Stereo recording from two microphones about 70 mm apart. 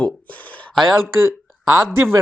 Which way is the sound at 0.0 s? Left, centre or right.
Left.